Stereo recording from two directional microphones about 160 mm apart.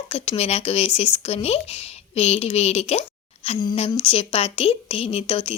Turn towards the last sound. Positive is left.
turn(degrees=35)  # may be behind; listen again after turning